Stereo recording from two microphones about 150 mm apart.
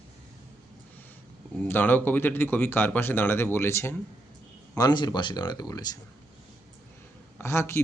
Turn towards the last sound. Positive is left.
turn(degrees=15)  # may be behind; listen again after turning